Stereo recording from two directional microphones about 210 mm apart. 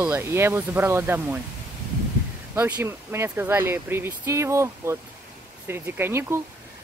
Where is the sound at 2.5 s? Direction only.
10° right (ahead or behind).